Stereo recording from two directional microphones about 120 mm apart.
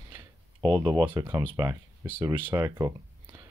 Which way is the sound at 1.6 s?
30° right (ahead or behind).